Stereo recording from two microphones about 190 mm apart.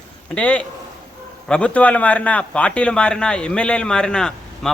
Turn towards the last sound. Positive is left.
turn(degrees=5)  # may be behind; listen again after turning